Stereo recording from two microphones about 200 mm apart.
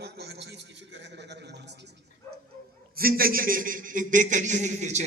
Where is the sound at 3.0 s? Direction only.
45° right (ahead or behind).